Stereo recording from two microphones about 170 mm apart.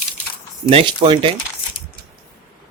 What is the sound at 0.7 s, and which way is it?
Speech, 30° right (ahead or behind).